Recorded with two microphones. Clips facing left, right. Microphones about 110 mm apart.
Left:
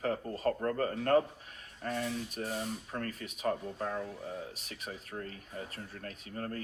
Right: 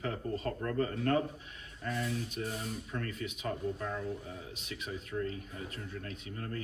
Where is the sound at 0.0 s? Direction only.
40° left (ahead or behind).